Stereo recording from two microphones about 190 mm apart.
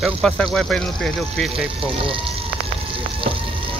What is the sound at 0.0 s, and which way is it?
Speech, centre (ahead or behind).